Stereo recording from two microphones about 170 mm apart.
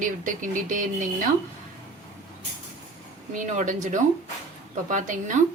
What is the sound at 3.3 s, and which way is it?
A woman's voice, 50° right (ahead or behind).